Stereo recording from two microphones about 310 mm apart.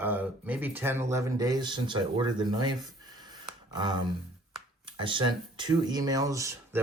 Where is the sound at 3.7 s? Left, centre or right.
Centre.